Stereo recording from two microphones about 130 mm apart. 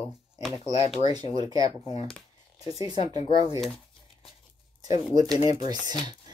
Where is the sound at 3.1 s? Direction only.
45° left (ahead or behind).